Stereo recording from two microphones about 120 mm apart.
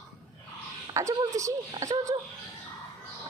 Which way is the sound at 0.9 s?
25° right (ahead or behind).